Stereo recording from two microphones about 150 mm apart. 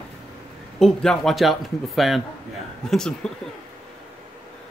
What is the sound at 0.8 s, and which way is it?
A man's voice, centre (ahead or behind).